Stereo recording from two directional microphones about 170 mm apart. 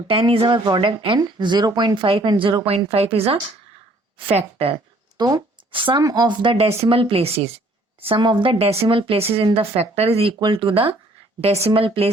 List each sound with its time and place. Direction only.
0.1 s speech: 30° right (ahead or behind)